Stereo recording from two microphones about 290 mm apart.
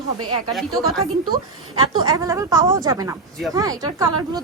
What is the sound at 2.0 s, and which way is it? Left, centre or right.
Speech, centre.